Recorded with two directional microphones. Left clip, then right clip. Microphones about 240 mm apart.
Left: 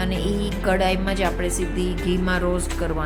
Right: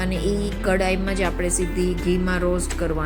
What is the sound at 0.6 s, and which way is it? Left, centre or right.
A woman's voice, centre.